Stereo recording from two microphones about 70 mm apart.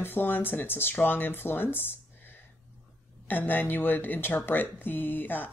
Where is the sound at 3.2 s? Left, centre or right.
Left.